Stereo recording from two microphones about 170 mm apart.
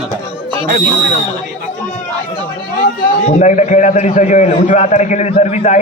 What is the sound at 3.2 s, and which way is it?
A man's voice, 45° left (ahead or behind).